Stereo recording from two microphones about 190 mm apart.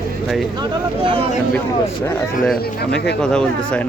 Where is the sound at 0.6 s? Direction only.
25° right (ahead or behind).